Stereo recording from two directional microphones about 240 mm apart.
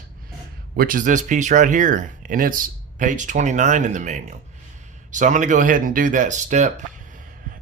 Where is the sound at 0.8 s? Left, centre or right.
Right.